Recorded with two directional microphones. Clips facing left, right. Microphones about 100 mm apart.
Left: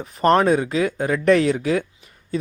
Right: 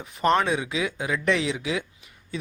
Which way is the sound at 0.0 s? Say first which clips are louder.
Left 6 dB; 40° left (ahead or behind).